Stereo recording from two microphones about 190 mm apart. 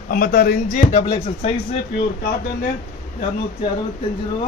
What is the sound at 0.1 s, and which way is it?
Speech, 50° left (ahead or behind).